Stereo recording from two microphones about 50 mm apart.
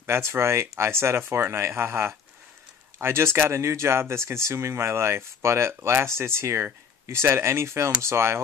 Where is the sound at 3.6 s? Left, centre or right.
Right.